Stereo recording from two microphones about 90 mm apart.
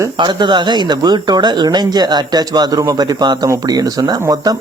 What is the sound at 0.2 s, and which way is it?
Speech, 60° right (ahead or behind).